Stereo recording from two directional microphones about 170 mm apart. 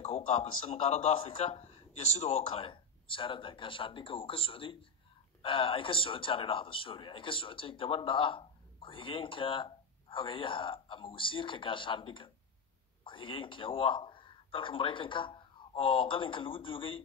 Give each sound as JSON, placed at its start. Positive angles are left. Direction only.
{"t": 0.0, "sound": "a man's voice", "side_deg": 40}